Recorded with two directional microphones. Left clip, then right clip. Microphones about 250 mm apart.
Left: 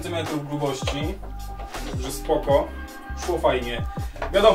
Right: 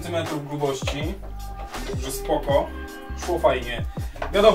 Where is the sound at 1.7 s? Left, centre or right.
Centre.